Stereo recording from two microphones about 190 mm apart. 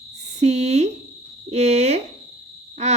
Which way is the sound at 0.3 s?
35° right (ahead or behind).